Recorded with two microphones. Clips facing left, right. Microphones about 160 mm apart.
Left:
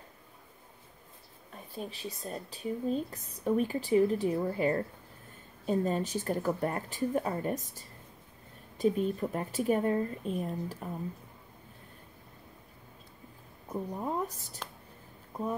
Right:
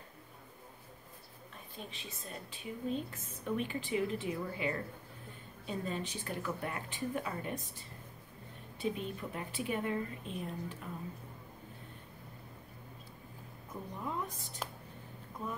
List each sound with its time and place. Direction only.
1.8 s a woman's voice: 35° left (ahead or behind)
13.7 s a woman's voice: 40° left (ahead or behind)